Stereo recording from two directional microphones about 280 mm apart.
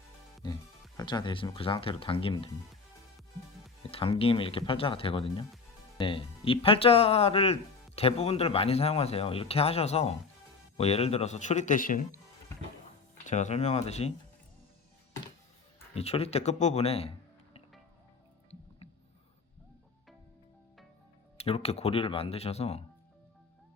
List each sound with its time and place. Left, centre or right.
0.4 s speech: centre
3.9 s speech: centre
13.2 s speech: left
16.0 s speech: left
21.3 s speech: left